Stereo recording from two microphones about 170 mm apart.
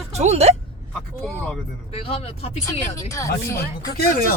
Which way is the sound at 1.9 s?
35° left (ahead or behind).